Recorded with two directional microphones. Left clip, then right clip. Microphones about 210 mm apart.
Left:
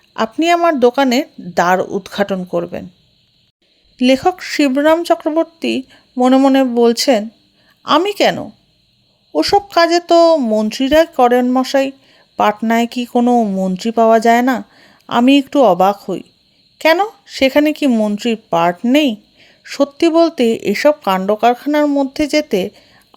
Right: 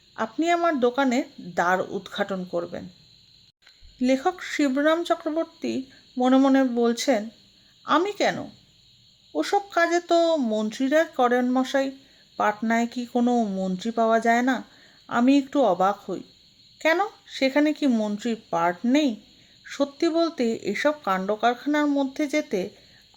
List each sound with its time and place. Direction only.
0.2 s speech: 40° left (ahead or behind)
3.9 s speech: 35° left (ahead or behind)